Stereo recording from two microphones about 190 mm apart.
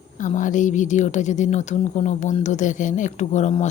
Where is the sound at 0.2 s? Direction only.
40° left (ahead or behind).